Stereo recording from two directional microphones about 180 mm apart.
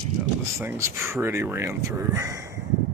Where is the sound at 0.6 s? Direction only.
15° right (ahead or behind).